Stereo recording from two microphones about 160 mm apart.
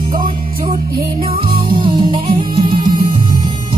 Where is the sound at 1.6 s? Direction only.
30° right (ahead or behind).